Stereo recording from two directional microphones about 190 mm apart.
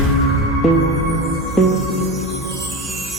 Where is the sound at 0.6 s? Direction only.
Centre (ahead or behind).